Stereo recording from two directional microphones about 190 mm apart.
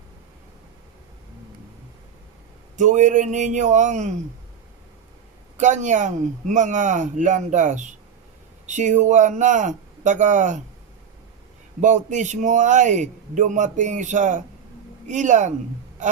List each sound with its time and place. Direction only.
2.7 s a man's voice: 40° right (ahead or behind)
5.5 s a man's voice: 40° right (ahead or behind)
11.8 s a man's voice: 40° right (ahead or behind)